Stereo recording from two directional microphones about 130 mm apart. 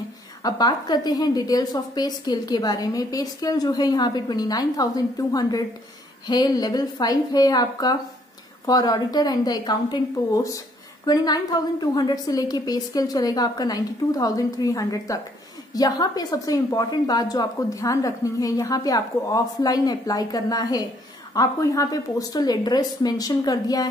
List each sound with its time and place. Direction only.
0.4 s a woman's voice: 30° left (ahead or behind)